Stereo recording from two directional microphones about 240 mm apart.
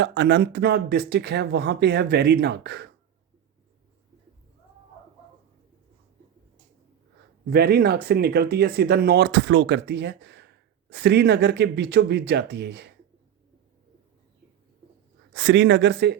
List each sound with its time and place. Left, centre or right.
0.0 s speech: right
7.5 s speech: right
15.3 s speech: right